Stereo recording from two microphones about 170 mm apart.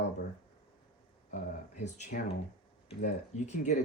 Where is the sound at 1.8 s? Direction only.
45° left (ahead or behind).